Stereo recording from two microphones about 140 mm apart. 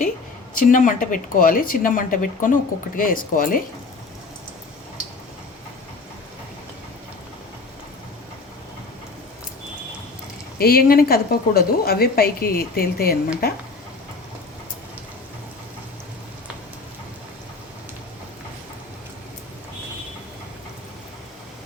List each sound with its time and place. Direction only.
0.5 s a woman's voice: 70° left (ahead or behind)
10.6 s a woman's voice: 90° left